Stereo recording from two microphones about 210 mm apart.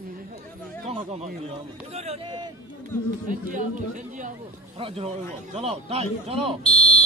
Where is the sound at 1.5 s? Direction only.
30° right (ahead or behind).